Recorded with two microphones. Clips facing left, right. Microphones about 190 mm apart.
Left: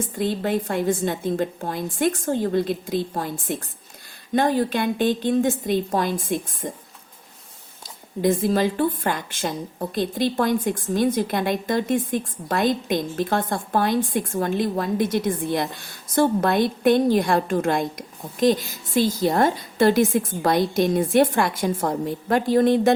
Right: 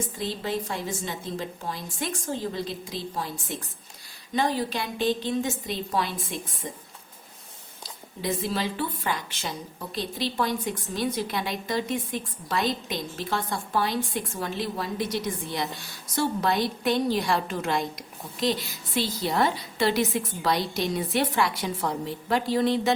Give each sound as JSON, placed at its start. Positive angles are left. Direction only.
{"t": 0.2, "sound": "a woman's voice", "side_deg": 55}
{"t": 8.2, "sound": "a woman's voice", "side_deg": 50}